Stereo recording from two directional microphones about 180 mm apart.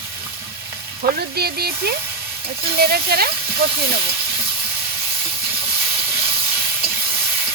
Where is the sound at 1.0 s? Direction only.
60° right (ahead or behind).